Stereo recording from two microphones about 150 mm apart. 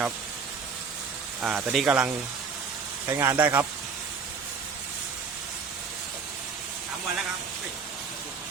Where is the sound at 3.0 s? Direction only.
20° right (ahead or behind).